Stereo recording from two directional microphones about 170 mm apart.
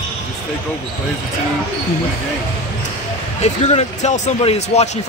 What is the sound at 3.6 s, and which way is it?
Speech, 40° left (ahead or behind).